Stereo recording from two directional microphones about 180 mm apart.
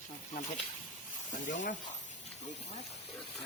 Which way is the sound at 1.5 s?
45° left (ahead or behind).